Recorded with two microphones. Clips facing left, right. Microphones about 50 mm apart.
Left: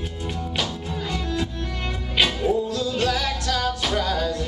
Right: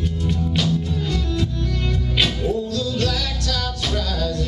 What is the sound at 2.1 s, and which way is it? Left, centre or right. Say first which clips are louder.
Music: left 2 dB; centre.